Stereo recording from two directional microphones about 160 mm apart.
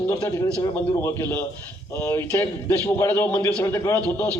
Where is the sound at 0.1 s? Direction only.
20° left (ahead or behind).